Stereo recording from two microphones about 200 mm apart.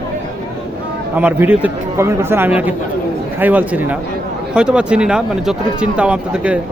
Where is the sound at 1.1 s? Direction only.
10° right (ahead or behind).